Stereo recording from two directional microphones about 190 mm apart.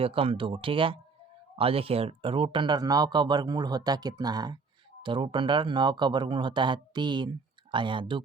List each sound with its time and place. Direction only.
0.0 s speech: 30° right (ahead or behind)